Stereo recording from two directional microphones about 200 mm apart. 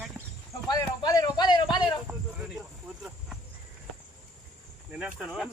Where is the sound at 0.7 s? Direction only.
20° left (ahead or behind).